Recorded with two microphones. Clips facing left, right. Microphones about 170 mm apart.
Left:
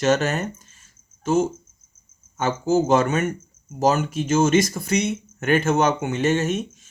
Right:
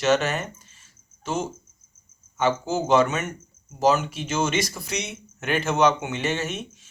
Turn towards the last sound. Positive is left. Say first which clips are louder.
# left 6 dB
turn(degrees=45)  # may be behind; listen again after turning